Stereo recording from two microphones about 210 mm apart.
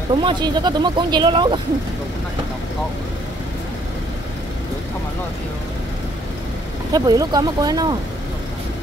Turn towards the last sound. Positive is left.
turn(degrees=-20)  # may be behind; listen again after turning